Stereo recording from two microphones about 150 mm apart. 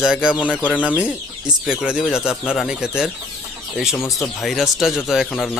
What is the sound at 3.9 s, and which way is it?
Speech, 15° left (ahead or behind).